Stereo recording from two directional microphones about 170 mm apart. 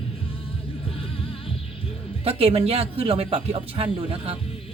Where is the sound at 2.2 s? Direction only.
35° right (ahead or behind).